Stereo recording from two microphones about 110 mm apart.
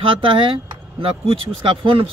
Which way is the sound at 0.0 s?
50° right (ahead or behind).